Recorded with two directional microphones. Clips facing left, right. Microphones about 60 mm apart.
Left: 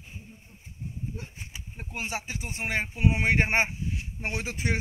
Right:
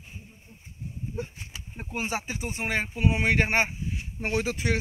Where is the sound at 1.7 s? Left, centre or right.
Centre.